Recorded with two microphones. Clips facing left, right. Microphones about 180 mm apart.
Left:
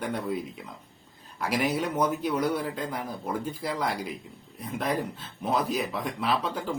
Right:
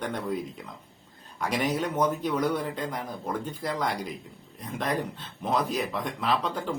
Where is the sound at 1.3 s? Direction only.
5° left (ahead or behind).